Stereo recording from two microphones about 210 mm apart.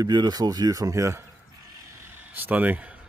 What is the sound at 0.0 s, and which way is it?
Speech, 20° right (ahead or behind).